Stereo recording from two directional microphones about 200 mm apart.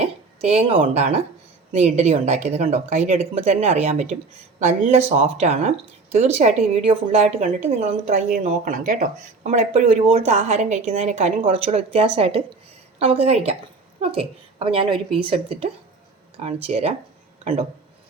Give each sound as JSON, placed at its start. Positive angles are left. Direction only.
{"t": 0.0, "sound": "a woman's voice", "side_deg": -30}